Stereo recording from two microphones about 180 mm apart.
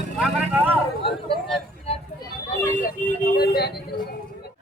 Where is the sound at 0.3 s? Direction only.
10° right (ahead or behind).